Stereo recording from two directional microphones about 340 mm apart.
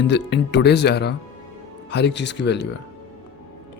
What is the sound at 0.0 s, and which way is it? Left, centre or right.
A man's voice, left.